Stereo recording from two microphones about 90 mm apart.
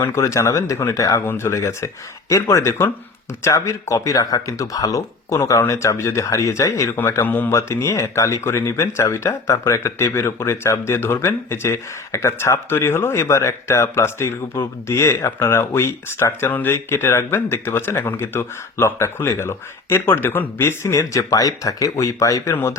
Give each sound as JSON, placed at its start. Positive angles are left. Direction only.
{"t": 0.0, "sound": "speech", "side_deg": 35}
{"t": 1.2, "sound": "speech", "side_deg": 25}
{"t": 7.5, "sound": "speech", "side_deg": 30}